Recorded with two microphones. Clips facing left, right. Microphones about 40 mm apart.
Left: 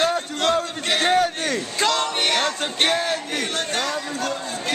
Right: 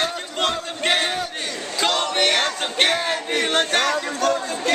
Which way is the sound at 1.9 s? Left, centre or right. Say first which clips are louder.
Right 2 dB; right.